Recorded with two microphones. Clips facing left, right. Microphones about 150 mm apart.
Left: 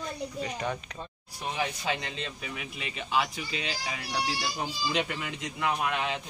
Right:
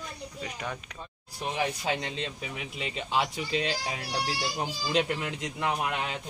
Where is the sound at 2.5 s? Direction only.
30° right (ahead or behind).